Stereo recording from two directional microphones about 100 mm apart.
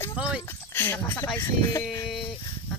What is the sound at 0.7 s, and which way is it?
Speech, 20° left (ahead or behind).